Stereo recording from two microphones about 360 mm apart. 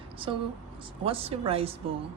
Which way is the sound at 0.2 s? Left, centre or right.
Centre.